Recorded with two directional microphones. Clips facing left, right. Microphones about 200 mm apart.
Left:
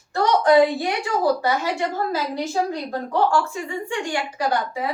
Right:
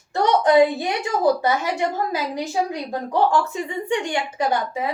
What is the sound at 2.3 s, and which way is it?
A woman's voice, 15° right (ahead or behind).